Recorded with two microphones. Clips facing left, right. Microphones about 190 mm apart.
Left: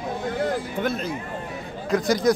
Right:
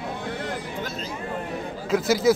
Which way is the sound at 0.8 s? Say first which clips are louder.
Left 7 dB; 55° left (ahead or behind).